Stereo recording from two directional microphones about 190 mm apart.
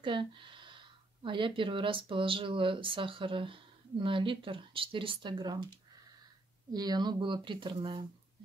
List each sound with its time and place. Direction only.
0.0 s speech: 25° right (ahead or behind)
6.7 s speech: 20° right (ahead or behind)